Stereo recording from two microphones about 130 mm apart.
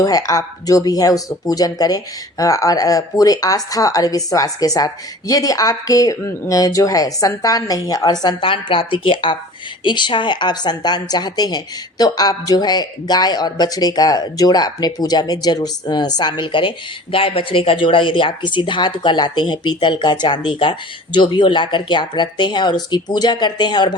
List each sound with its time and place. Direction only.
0.0 s a woman's voice: 25° left (ahead or behind)